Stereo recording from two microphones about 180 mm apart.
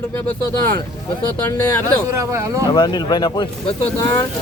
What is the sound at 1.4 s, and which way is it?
Speech, 10° left (ahead or behind).